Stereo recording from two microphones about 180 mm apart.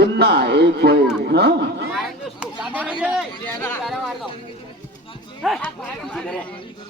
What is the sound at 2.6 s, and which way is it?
Chatter, 5° right (ahead or behind).